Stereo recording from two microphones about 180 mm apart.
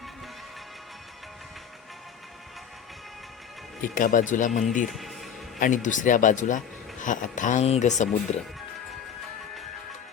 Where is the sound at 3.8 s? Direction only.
50° left (ahead or behind).